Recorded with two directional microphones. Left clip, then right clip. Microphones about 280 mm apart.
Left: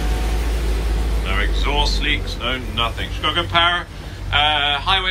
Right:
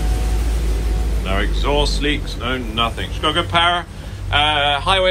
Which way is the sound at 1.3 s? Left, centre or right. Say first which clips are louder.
Right 2 dB; centre.